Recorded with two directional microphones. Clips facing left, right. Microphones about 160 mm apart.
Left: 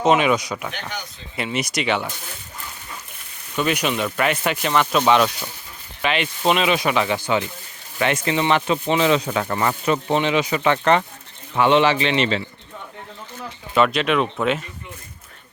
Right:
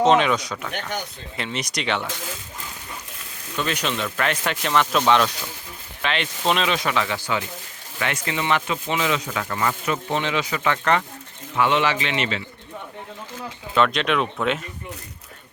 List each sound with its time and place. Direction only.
0.0 s speech: 10° left (ahead or behind)
3.6 s speech: 10° left (ahead or behind); by 10.2 s 30° left (ahead or behind)
10.2 s speech: 20° left (ahead or behind)
13.7 s speech: 5° left (ahead or behind)